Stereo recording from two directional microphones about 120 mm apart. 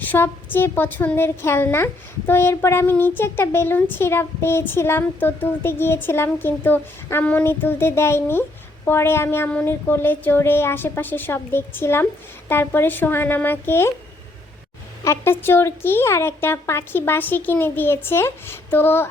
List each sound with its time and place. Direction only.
0.0 s a woman's voice: 15° left (ahead or behind)
15.0 s a woman's voice: 20° left (ahead or behind)